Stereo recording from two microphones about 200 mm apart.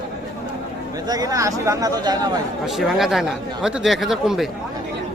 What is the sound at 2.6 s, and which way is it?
Speech, centre (ahead or behind).